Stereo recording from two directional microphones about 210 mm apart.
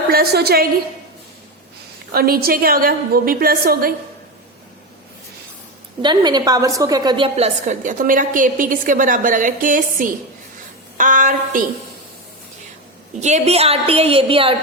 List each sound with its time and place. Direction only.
0.1 s a woman's voice: 45° right (ahead or behind)
2.1 s a woman's voice: 45° right (ahead or behind)
6.0 s a woman's voice: 20° right (ahead or behind); by 11.6 s 40° right (ahead or behind)
13.1 s a woman's voice: 35° right (ahead or behind)